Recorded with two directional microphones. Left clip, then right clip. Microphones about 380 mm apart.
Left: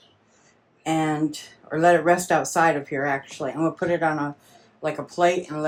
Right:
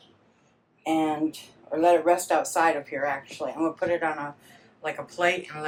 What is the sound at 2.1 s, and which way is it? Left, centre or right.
Speech, left.